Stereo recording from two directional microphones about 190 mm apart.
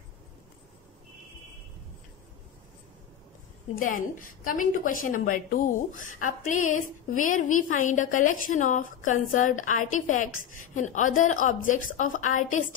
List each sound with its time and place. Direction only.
3.7 s a woman's voice: 45° left (ahead or behind)